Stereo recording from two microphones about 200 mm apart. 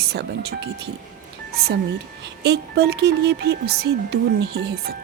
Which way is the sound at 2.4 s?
55° right (ahead or behind).